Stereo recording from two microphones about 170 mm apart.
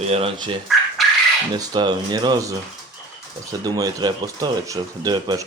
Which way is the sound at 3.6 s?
25° right (ahead or behind).